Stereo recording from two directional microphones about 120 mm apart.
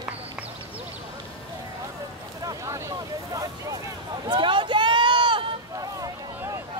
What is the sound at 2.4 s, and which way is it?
Boat, 30° right (ahead or behind).